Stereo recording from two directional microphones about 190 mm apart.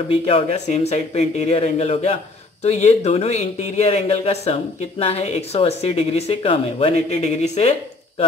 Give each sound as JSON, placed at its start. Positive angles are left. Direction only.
{"t": 0.1, "sound": "speech", "side_deg": 30}